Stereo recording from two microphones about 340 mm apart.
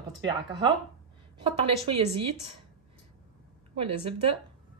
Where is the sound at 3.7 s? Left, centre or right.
Centre.